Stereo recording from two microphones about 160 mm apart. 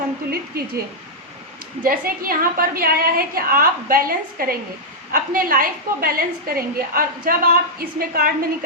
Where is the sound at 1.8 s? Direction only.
60° right (ahead or behind).